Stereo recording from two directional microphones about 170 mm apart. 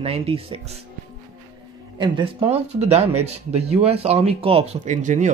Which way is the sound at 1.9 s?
30° right (ahead or behind).